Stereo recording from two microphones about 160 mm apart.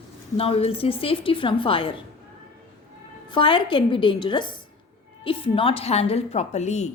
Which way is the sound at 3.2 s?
30° left (ahead or behind).